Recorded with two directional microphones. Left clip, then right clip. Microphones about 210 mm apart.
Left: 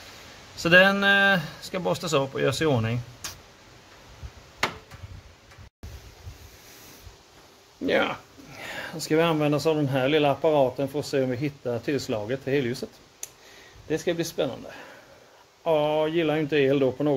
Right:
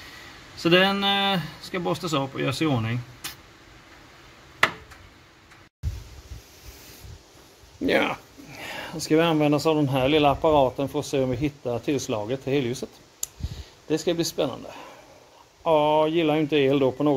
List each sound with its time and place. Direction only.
0.6 s speech: 5° left (ahead or behind)
7.8 s speech: 30° right (ahead or behind)
8.5 s speech: 15° right (ahead or behind)